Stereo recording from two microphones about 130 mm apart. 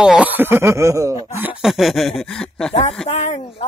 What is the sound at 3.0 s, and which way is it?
Speech, 55° left (ahead or behind).